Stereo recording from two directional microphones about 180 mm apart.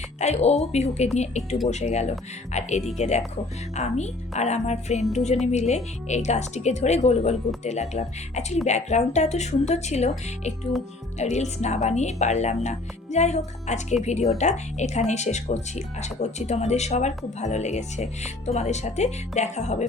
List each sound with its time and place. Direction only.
0.2 s speech: 40° left (ahead or behind)